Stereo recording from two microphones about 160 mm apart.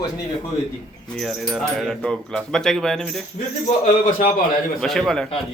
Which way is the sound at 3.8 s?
55° left (ahead or behind).